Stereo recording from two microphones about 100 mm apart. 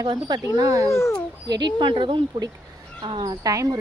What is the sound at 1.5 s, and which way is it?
Speech, 50° right (ahead or behind).